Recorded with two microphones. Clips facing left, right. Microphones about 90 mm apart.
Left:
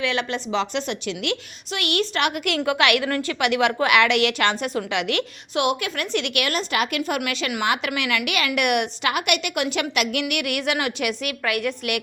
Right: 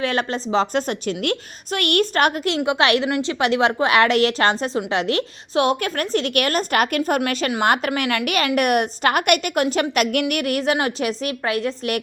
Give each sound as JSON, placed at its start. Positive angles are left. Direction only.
{"t": 0.0, "sound": "a woman's voice", "side_deg": -40}
{"t": 2.6, "sound": "a woman's voice", "side_deg": -30}
{"t": 7.2, "sound": "a woman's voice", "side_deg": -35}